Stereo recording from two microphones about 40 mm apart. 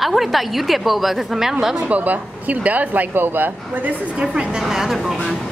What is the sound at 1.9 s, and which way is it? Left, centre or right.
Speech, right.